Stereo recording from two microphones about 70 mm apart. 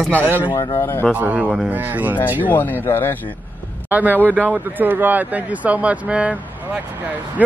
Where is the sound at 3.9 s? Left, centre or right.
Right.